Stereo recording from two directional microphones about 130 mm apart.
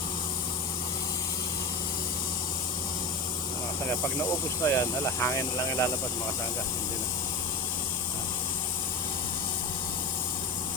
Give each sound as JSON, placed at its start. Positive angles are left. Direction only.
{"t": 4.6, "sound": "speech", "side_deg": 20}